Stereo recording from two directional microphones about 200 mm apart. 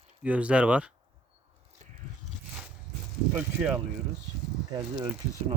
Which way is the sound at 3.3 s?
10° right (ahead or behind).